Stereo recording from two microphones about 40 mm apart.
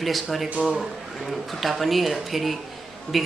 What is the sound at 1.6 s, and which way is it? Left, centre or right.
Speech, centre.